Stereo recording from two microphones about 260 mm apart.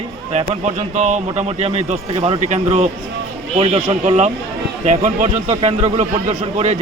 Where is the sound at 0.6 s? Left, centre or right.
Right.